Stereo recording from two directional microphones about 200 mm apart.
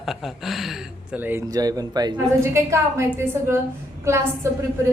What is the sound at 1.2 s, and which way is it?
A woman's voice, 15° right (ahead or behind).